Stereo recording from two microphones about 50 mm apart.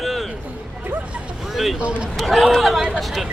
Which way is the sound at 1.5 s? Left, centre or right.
Centre.